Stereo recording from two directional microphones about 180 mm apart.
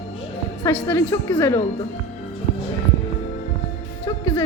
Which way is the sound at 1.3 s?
25° left (ahead or behind).